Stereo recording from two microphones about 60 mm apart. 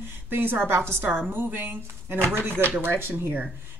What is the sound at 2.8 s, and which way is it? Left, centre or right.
Speech, right.